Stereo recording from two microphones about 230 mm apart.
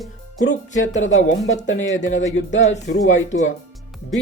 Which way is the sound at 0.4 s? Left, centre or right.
Left.